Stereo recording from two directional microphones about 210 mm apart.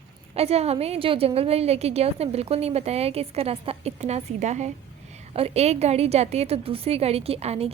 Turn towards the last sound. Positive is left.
turn(degrees=-30)  # may be behind; listen again after turning